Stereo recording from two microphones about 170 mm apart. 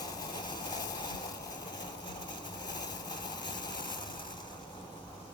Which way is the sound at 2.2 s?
25° left (ahead or behind).